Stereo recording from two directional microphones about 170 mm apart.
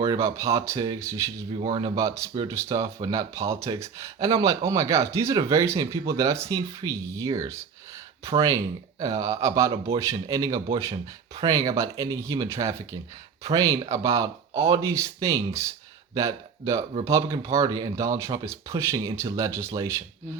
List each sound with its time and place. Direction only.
0.0 s speech: 20° right (ahead or behind)